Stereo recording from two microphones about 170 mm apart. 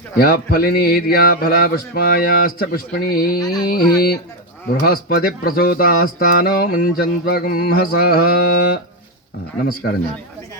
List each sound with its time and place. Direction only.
0.2 s speech: 60° left (ahead or behind)